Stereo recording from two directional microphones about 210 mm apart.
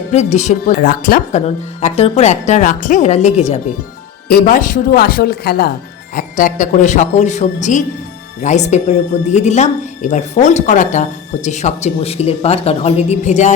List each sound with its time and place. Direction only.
0.1 s a woman's voice: 30° left (ahead or behind)